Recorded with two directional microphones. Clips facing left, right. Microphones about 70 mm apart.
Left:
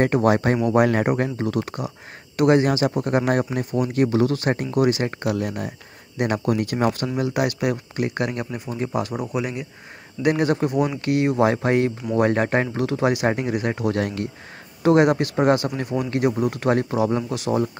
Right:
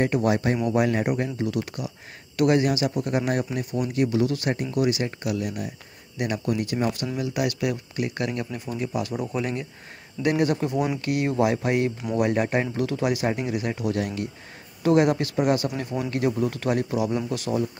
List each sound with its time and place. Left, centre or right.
0.0 s speech: left
2.3 s speech: left
6.2 s speech: left
7.3 s speech: left
9.2 s speech: centre
10.2 s speech: left
14.8 s speech: left